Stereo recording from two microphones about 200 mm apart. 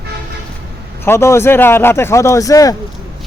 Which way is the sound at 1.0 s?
15° left (ahead or behind).